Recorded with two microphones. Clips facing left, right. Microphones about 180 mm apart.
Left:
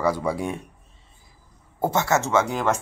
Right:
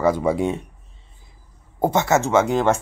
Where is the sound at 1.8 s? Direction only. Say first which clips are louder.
Right 4 dB; 20° right (ahead or behind).